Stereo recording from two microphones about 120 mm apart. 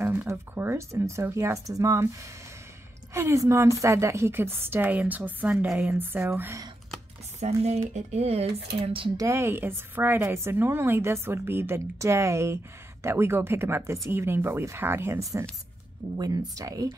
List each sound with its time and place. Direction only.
0.0 s a woman's voice: 20° right (ahead or behind)
3.1 s a woman's voice: 25° right (ahead or behind)
7.3 s speech: 65° right (ahead or behind)
9.1 s a woman's voice: 25° right (ahead or behind)